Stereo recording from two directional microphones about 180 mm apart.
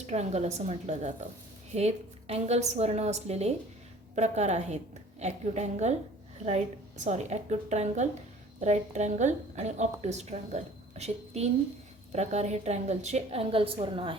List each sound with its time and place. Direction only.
0.0 s a woman's voice: 40° right (ahead or behind)